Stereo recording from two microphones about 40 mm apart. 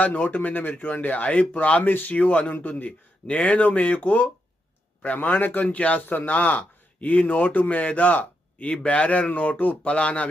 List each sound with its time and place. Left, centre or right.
0.0 s speech: left
1.8 s speech: left
2.1 s speech: left
5.6 s speech: left